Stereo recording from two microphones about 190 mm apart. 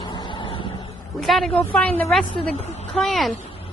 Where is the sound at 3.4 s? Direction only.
30° left (ahead or behind).